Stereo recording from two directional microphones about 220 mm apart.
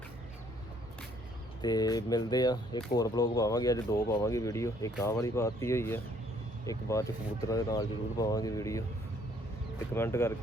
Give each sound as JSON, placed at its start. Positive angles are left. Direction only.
{"t": 1.6, "sound": "speech", "side_deg": 15}
{"t": 9.9, "sound": "speech", "side_deg": 10}